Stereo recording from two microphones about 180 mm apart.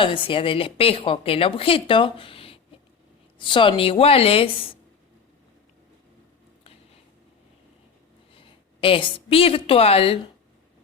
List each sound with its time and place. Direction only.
0.0 s a woman's voice: 30° left (ahead or behind)
8.4 s a woman's voice: 30° left (ahead or behind)